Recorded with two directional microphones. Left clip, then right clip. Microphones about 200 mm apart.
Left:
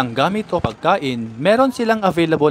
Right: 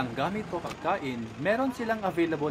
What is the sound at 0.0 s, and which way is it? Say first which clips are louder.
Speech: left 12 dB; 50° left (ahead or behind).